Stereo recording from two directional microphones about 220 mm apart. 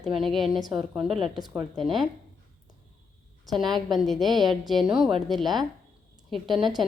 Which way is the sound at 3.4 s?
Centre (ahead or behind).